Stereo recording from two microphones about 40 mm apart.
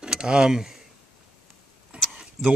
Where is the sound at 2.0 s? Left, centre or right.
Right.